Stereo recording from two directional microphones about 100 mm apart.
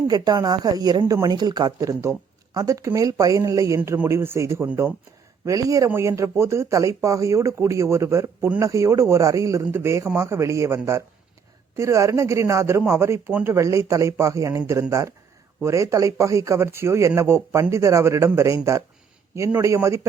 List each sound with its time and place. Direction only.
0.1 s a woman's voice: 45° right (ahead or behind); by 4.9 s 20° right (ahead or behind)
5.5 s a woman's voice: 35° right (ahead or behind)